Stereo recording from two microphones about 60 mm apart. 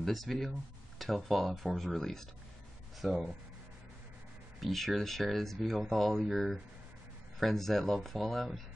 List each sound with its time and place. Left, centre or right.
0.0 s speech: centre
4.6 s speech: centre